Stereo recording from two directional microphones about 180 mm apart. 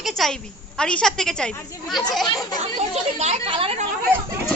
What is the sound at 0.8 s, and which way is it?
A woman's voice, 5° left (ahead or behind).